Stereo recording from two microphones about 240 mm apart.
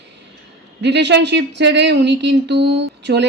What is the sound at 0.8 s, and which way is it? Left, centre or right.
Speech, right.